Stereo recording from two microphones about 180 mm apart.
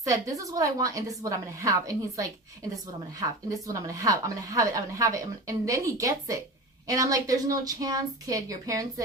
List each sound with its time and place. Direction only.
0.0 s a woman's voice: 20° right (ahead or behind)